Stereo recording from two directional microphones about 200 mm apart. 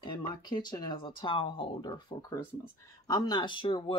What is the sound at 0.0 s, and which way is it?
Speech, 20° left (ahead or behind).